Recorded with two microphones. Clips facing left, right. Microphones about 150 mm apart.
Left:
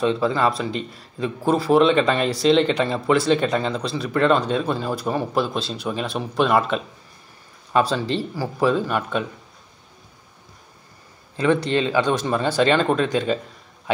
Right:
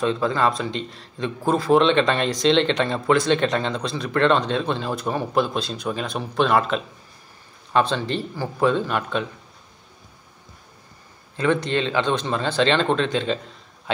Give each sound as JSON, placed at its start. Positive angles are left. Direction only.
{"t": 0.3, "sound": "speech", "side_deg": 5}
{"t": 7.9, "sound": "speech", "side_deg": 30}
{"t": 8.4, "sound": "speech", "side_deg": 5}
{"t": 11.5, "sound": "speech", "side_deg": 35}
{"t": 11.8, "sound": "speech", "side_deg": 10}